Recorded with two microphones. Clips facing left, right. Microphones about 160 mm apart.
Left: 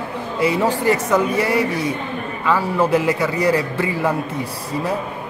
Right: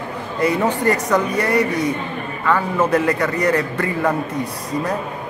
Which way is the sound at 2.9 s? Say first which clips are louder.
Even; 10° left (ahead or behind).